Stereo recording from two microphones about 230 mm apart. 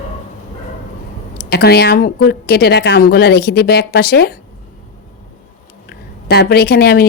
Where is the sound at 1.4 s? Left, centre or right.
Left.